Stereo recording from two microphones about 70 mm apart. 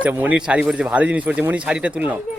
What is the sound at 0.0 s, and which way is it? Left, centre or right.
Speech, right.